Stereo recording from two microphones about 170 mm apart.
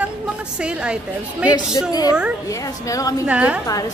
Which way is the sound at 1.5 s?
25° left (ahead or behind).